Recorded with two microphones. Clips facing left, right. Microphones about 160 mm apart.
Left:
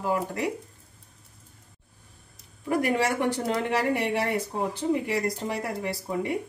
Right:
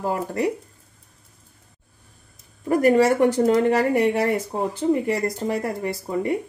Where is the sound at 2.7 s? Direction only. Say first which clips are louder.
Right 8 dB; 45° right (ahead or behind).